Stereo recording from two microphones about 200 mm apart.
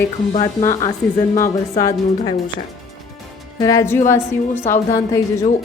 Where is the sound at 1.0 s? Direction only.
5° left (ahead or behind).